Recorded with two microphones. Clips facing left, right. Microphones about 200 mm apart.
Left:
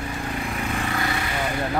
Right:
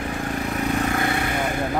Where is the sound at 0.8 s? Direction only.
50° right (ahead or behind).